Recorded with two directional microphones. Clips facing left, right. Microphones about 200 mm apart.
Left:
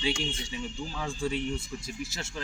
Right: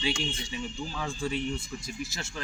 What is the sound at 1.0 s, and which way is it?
Speech, 25° left (ahead or behind).